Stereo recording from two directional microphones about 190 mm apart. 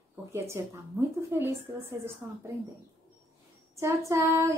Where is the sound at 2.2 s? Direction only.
10° right (ahead or behind).